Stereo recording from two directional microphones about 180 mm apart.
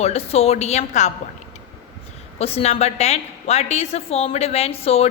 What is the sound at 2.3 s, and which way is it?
A woman's voice, 35° left (ahead or behind).